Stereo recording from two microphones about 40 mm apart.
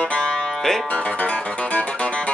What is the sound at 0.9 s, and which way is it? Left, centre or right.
Music, left.